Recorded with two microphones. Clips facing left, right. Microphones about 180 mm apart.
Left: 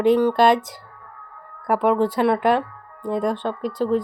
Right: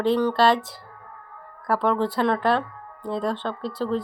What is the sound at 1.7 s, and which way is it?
Speech, 15° left (ahead or behind).